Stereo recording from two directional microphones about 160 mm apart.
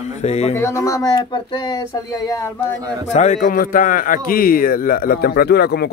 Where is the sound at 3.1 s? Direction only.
50° left (ahead or behind).